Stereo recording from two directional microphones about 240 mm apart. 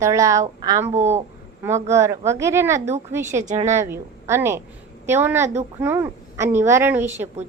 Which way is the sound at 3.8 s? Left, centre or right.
Centre.